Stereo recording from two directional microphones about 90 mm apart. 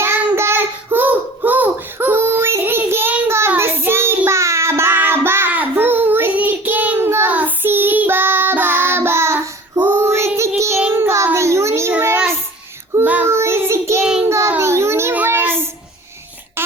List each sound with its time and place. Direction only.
0.0 s child singing: 30° right (ahead or behind)
11.9 s child singing: 20° right (ahead or behind)
13.2 s child singing: 30° right (ahead or behind)
14.0 s child singing: 10° right (ahead or behind)
14.3 s child singing: 30° right (ahead or behind)
14.6 s a sound: 30° right (ahead or behind)
15.1 s child singing: 20° right (ahead or behind)
16.6 s a sound: 25° right (ahead or behind)